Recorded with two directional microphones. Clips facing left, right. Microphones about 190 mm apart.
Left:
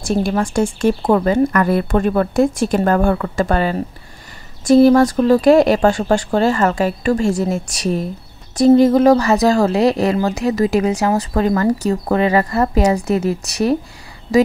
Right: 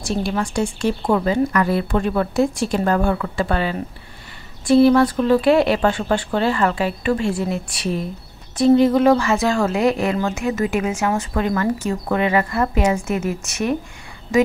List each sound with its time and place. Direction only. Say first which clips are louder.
0.0 s a woman's voice: left 4 dB; 50° left (ahead or behind)